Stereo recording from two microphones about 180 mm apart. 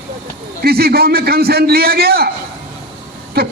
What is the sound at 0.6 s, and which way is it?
A man's voice, 60° right (ahead or behind).